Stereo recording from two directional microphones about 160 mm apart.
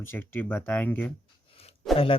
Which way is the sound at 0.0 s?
15° left (ahead or behind).